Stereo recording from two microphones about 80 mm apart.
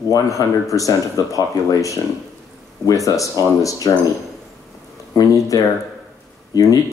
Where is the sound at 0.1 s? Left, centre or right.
Left.